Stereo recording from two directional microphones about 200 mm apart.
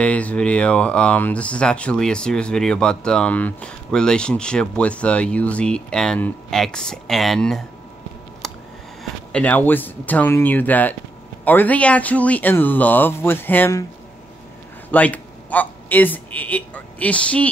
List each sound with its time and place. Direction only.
0.0 s speech: 5° left (ahead or behind)
8.4 s a sound: centre (ahead or behind)
9.3 s speech: 5° left (ahead or behind)
14.9 s a man's voice: 10° left (ahead or behind)